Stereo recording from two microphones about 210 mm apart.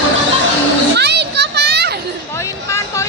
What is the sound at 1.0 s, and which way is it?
Children playing, 50° right (ahead or behind).